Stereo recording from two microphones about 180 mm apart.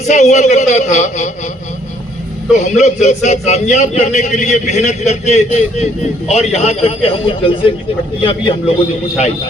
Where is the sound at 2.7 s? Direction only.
40° left (ahead or behind).